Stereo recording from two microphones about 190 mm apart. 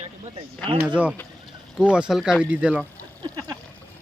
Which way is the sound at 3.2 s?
20° right (ahead or behind).